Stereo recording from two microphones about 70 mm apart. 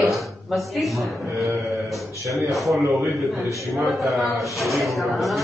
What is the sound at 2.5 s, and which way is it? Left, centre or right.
Speech, centre.